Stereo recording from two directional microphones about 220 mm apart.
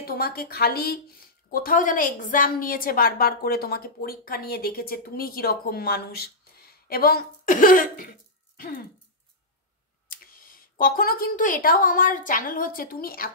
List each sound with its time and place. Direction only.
0.0 s a woman's voice: 45° left (ahead or behind)
8.5 s a sound: 40° left (ahead or behind)
10.0 s speech: 40° left (ahead or behind)